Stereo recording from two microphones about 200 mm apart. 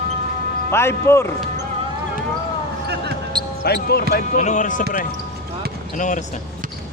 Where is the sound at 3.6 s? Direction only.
55° left (ahead or behind).